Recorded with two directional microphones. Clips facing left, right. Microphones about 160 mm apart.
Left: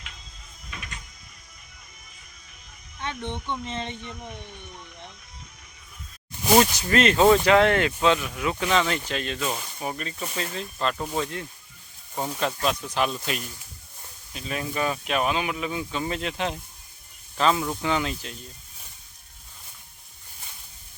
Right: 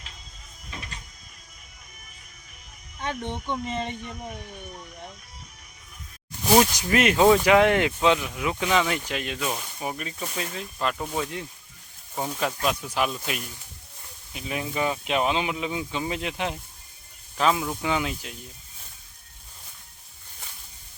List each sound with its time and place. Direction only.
0.7 s vehicle: 30° right (ahead or behind)
3.2 s speech: 10° right (ahead or behind)
6.6 s speech: 10° right (ahead or behind)
12.4 s speech: 5° right (ahead or behind)
14.3 s speech: 15° right (ahead or behind)